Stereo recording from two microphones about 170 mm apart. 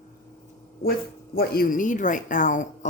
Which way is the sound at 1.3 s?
65° left (ahead or behind).